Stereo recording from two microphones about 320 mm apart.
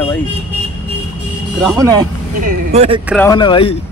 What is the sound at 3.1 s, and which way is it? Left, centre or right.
Speech, centre.